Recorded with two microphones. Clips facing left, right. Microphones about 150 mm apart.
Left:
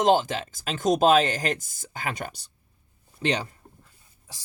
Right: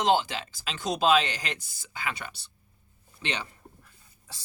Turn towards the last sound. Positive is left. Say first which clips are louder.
# even
turn(degrees=15)  # may be behind; listen again after turning